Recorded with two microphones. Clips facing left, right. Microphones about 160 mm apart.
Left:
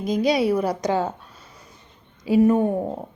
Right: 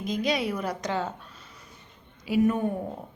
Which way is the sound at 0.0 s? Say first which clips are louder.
Left 7 dB; 35° left (ahead or behind).